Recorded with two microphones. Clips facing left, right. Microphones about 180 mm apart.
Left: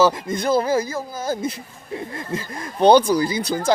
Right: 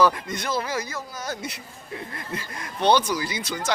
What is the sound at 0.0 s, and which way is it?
Speech, 25° left (ahead or behind).